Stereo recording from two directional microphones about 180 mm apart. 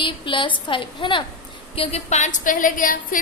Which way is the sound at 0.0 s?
30° left (ahead or behind).